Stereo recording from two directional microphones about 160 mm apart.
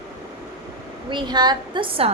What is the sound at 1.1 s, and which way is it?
A woman's voice, 30° right (ahead or behind).